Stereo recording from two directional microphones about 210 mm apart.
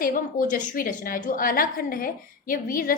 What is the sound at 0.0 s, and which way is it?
A woman's voice, 40° left (ahead or behind).